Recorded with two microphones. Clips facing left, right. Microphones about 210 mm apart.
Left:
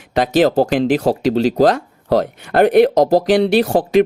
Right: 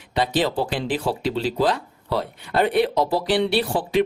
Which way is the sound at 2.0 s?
85° left.